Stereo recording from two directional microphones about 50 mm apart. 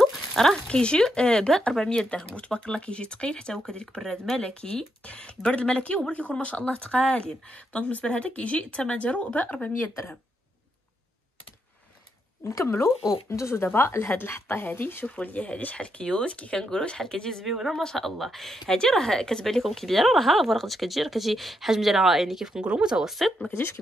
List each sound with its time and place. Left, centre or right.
0.0 s a sound: centre
0.7 s speech: centre
4.4 s speech: left
9.8 s a woman's voice: left
12.4 s speech: left
12.7 s speech: left
13.7 s a woman's voice: left
15.0 s speech: left; by 17.5 s centre
17.5 s speech: centre
23.0 s speech: centre
23.5 s a woman's voice: left